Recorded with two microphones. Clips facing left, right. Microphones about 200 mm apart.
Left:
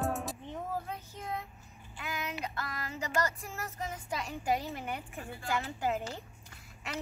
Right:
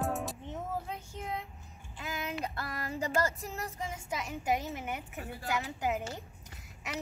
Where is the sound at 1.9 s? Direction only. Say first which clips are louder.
Right 1 dB; 30° right (ahead or behind).